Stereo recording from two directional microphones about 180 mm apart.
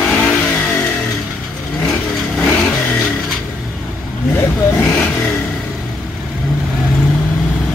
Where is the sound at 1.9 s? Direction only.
Centre (ahead or behind).